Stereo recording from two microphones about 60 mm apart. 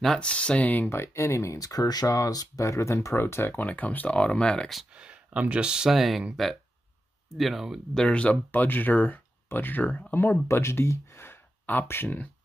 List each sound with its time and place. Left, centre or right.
0.0 s speech: centre
0.8 s speech: left
1.6 s speech: left
3.2 s speech: left
3.6 s speech: left
4.9 s speech: centre
7.3 s speech: centre
8.1 s speech: left